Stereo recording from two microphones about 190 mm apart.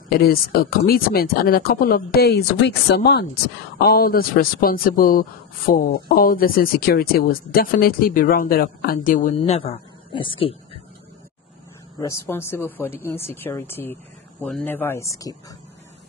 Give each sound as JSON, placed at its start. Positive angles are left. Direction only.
{"t": 0.1, "sound": "speech", "side_deg": 50}
{"t": 9.4, "sound": "a man's voice", "side_deg": 30}
{"t": 12.0, "sound": "speech", "side_deg": 15}